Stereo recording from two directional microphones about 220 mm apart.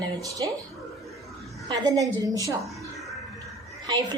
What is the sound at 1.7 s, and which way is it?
Speech, 15° right (ahead or behind).